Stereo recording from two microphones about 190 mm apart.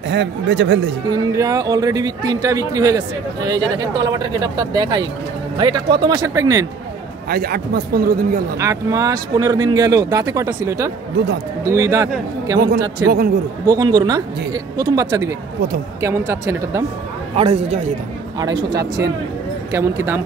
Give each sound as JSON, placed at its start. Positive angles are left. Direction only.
{"t": 0.1, "sound": "speech", "side_deg": -70}
{"t": 1.1, "sound": "speech", "side_deg": -15}
{"t": 7.2, "sound": "a man's voice", "side_deg": -55}
{"t": 8.5, "sound": "speech", "side_deg": -15}
{"t": 12.5, "sound": "speech", "side_deg": -55}
{"t": 13.7, "sound": "speech", "side_deg": -20}
{"t": 17.4, "sound": "a man's voice", "side_deg": -35}
{"t": 18.4, "sound": "speech", "side_deg": -20}